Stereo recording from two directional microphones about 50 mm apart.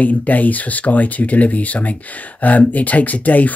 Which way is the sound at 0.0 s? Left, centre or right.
Left.